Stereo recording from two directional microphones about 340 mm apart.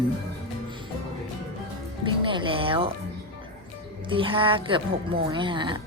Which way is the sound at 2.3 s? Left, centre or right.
Centre.